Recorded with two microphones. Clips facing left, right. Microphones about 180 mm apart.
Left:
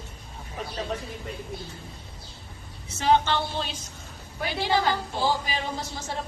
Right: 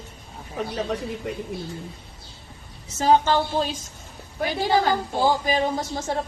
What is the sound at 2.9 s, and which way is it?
A woman's voice, 40° right (ahead or behind).